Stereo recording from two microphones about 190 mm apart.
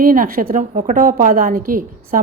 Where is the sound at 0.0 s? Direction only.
45° right (ahead or behind).